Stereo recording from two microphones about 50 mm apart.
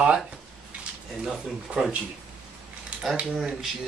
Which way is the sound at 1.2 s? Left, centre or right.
Centre.